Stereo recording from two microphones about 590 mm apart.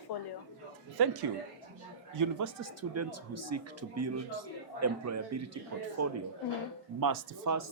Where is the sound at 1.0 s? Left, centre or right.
Right.